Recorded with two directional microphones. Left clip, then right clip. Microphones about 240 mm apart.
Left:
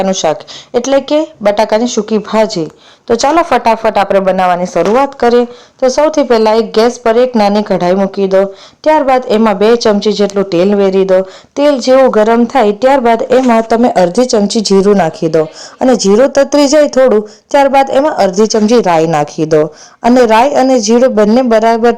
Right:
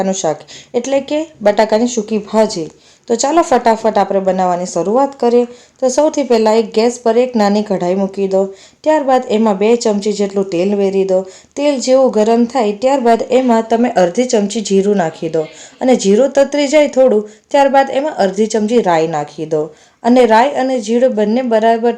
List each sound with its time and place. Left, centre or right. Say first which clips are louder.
0.1 s speech: left 5 dB; centre